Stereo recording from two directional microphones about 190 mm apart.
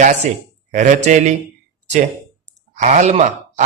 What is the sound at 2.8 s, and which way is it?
Speech, 40° right (ahead or behind).